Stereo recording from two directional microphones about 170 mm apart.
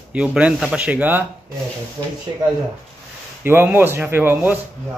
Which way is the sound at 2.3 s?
25° right (ahead or behind).